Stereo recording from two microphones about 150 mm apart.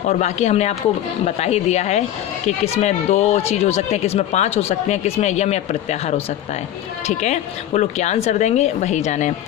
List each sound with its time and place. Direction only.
0.1 s speech: 50° left (ahead or behind)